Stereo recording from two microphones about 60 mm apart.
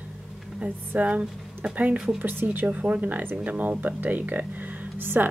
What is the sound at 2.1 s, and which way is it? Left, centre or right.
Speech, right.